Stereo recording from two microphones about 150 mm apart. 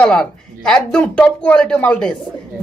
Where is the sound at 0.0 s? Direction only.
5° left (ahead or behind).